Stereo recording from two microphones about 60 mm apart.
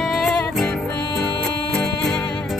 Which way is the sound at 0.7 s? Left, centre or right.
Left.